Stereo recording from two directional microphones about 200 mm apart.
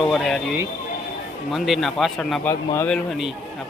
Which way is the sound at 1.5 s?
Centre (ahead or behind).